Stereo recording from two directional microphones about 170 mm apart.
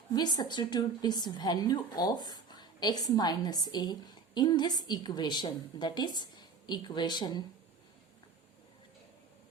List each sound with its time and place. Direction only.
0.1 s a woman's voice: 25° left (ahead or behind)